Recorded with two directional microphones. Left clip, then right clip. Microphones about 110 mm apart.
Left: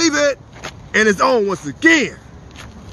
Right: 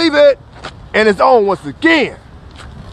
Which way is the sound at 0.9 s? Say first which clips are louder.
Right 4 dB; 30° left (ahead or behind).